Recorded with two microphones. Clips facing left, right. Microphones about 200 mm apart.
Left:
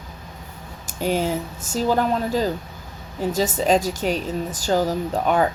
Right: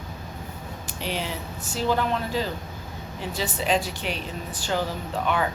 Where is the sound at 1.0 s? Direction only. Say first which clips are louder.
Left 9 dB; 45° left (ahead or behind).